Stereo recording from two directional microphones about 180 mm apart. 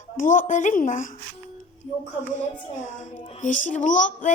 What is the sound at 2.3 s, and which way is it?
A child's voice, 45° left (ahead or behind).